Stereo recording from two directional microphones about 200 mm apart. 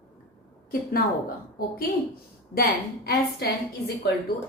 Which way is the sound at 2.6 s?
50° left (ahead or behind).